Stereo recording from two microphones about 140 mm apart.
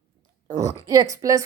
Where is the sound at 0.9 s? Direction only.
25° right (ahead or behind).